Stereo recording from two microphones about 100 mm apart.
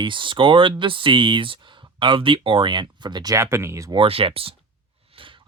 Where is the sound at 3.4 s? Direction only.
30° right (ahead or behind).